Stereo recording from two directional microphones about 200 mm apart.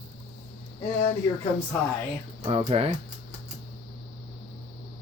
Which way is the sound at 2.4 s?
30° right (ahead or behind).